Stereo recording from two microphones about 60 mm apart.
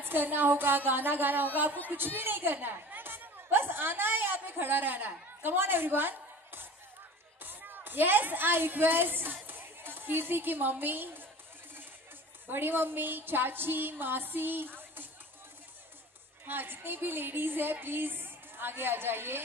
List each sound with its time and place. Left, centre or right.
0.0 s a woman's voice: right
12.4 s a woman's voice: right
16.4 s a woman's voice: right